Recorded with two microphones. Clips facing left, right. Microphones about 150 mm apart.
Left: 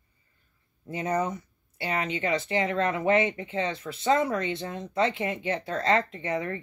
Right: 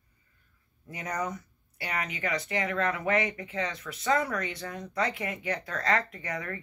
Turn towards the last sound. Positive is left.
turn(degrees=25)  # may be behind; listen again after turning